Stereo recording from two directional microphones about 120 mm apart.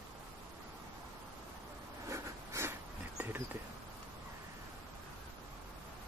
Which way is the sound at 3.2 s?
15° right (ahead or behind).